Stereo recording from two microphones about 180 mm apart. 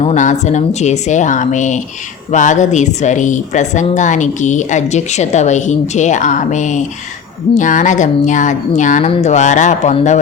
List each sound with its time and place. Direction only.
0.0 s speech: 40° left (ahead or behind)